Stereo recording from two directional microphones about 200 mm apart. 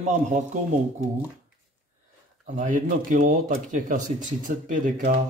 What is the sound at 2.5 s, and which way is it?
Speech, 40° right (ahead or behind).